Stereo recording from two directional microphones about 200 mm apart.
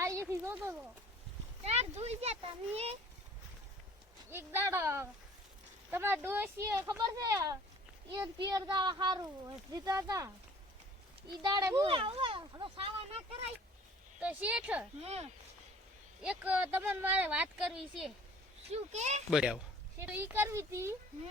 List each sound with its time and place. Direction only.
0.0 s a sound: 15° right (ahead or behind)
1.6 s speech: 30° right (ahead or behind)
4.3 s speech: 10° right (ahead or behind)
11.4 s speech: 20° right (ahead or behind)
11.9 s speech: 25° right (ahead or behind)
14.2 s speech: 5° right (ahead or behind)
15.0 s speech: 30° right (ahead or behind)
16.2 s speech: 5° right (ahead or behind)
18.7 s speech: 35° right (ahead or behind)
19.3 s speech: 5° right (ahead or behind)